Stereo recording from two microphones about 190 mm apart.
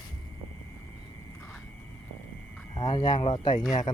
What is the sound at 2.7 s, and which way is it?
Speech, 20° left (ahead or behind).